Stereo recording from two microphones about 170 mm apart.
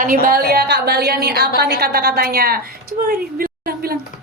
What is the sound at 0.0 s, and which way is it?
A woman's voice, 55° right (ahead or behind).